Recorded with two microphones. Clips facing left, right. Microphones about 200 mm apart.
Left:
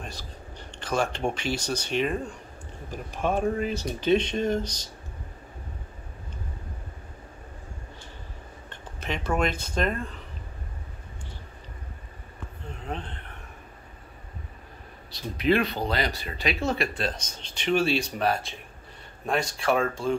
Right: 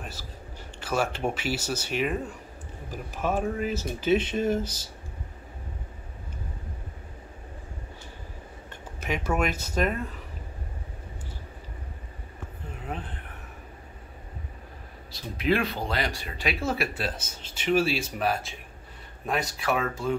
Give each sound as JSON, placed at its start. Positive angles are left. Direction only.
{"t": 0.0, "sound": "a sound", "side_deg": -5}
{"t": 0.7, "sound": "speech", "side_deg": -5}
{"t": 8.6, "sound": "speech", "side_deg": -10}
{"t": 12.7, "sound": "speech", "side_deg": -5}
{"t": 15.1, "sound": "speech", "side_deg": 0}
{"t": 19.8, "sound": "speech", "side_deg": 30}